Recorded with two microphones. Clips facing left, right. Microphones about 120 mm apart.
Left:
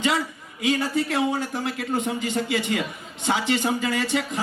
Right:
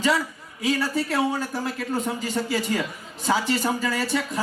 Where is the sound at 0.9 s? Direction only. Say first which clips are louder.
Left 1 dB; 35° right (ahead or behind).